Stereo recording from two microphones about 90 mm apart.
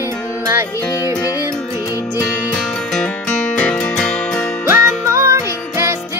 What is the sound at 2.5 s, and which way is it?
Music, 5° left (ahead or behind).